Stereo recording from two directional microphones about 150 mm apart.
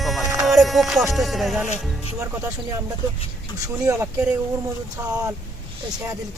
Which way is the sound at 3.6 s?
20° right (ahead or behind).